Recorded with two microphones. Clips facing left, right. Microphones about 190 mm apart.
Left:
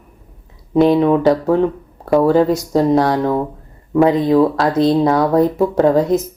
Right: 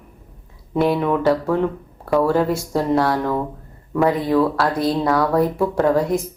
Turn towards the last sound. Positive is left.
turn(degrees=20)  # may be behind; listen again after turning